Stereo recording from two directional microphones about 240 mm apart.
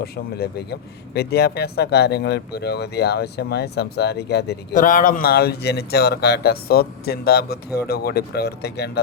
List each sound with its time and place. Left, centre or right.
0.0 s speech: left